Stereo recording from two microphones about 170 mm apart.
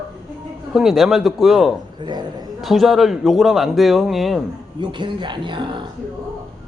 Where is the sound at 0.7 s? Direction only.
Centre (ahead or behind).